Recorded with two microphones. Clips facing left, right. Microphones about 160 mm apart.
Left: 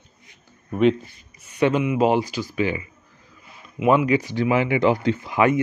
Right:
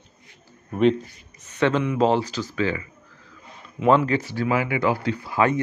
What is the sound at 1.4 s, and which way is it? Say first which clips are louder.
Speech: left 1 dB; 10° left (ahead or behind).